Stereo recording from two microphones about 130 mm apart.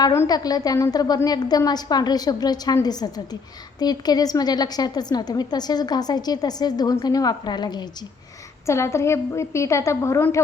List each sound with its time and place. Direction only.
0.0 s a woman's voice: 25° left (ahead or behind)
8.6 s a woman's voice: 20° left (ahead or behind)